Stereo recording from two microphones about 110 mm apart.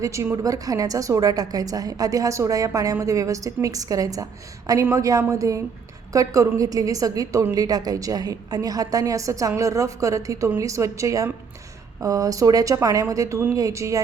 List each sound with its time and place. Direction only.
0.0 s a woman's voice: 25° right (ahead or behind)